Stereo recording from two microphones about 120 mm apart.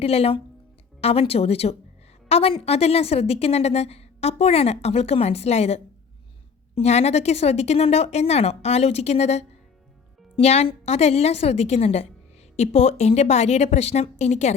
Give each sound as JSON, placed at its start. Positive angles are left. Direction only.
{"t": 0.0, "sound": "a woman's voice", "side_deg": 55}